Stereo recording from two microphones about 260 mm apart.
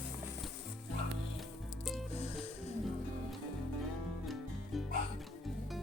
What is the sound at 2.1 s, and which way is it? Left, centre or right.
Music, left.